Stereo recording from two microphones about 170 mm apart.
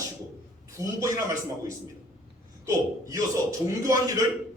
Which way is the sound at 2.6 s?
20° right (ahead or behind).